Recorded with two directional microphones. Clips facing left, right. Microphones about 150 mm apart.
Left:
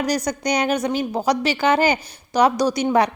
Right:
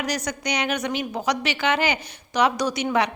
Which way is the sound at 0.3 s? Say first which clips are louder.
Left 5 dB; 40° left (ahead or behind).